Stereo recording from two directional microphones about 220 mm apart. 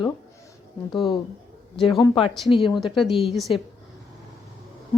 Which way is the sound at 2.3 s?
Centre (ahead or behind).